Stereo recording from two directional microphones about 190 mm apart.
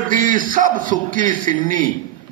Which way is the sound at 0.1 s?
45° right (ahead or behind).